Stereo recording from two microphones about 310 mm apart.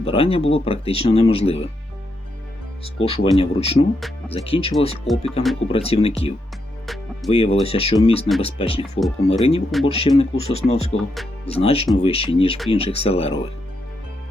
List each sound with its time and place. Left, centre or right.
0.0 s speech: centre
2.8 s speech: centre
5.0 s speech: centre
5.7 s speech: centre
6.8 s music: centre
7.3 s speech: centre
9.0 s speech: centre
9.4 s speech: centre
10.9 s speech: centre
11.4 s speech: centre